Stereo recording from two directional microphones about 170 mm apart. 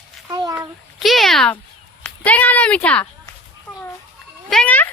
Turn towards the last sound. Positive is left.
turn(degrees=10)  # may be behind; listen again after turning